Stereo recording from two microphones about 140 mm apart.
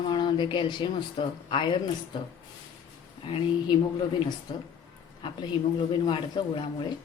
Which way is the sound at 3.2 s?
40° left (ahead or behind).